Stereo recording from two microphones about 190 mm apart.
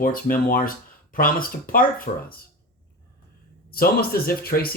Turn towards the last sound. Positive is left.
turn(degrees=50)  # may be behind; listen again after turning